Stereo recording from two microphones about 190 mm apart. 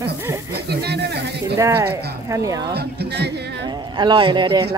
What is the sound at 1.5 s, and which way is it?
Speech, 15° right (ahead or behind).